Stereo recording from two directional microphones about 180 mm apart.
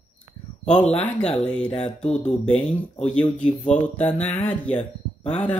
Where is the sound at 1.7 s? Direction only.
35° left (ahead or behind).